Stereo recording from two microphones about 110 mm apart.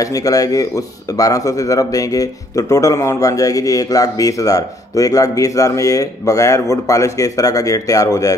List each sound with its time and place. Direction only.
0.0 s speech: 30° left (ahead or behind)